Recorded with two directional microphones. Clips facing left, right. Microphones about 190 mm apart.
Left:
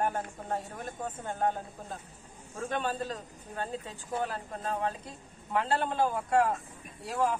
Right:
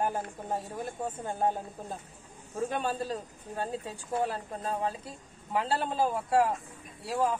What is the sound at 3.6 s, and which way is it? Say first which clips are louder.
Speech: right 2 dB; 35° right (ahead or behind).